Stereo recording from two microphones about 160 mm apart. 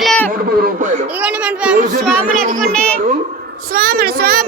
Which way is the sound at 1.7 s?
50° right (ahead or behind).